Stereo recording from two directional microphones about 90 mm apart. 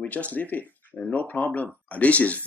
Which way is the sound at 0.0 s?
15° left (ahead or behind).